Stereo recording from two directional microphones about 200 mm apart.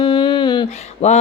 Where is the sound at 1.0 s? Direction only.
35° left (ahead or behind).